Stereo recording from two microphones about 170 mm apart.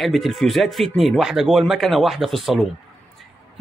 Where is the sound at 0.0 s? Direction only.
Centre (ahead or behind).